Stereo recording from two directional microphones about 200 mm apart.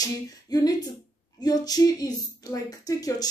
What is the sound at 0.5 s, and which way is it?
Speech, 20° left (ahead or behind).